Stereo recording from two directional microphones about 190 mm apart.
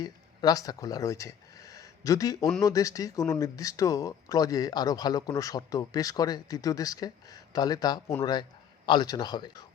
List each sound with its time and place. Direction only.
0.0 s speech: 20° left (ahead or behind)